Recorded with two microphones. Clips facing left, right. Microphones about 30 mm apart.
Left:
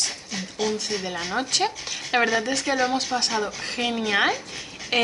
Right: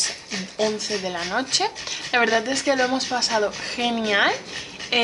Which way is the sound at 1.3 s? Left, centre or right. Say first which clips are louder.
Even; centre.